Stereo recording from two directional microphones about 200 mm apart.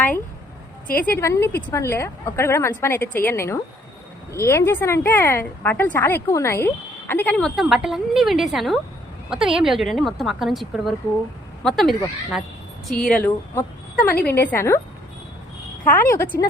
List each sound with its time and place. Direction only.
0.9 s a woman's voice: 45° left (ahead or behind)
1.1 s a woman's voice: 10° left (ahead or behind)
15.9 s a woman's voice: 10° left (ahead or behind)